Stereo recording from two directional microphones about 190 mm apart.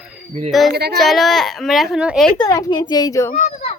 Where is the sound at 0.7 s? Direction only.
55° right (ahead or behind).